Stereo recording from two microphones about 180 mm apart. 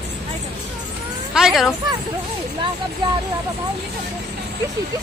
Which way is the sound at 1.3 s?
Centre (ahead or behind).